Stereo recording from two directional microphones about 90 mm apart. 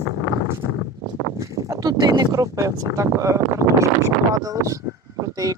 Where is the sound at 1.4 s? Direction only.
35° right (ahead or behind).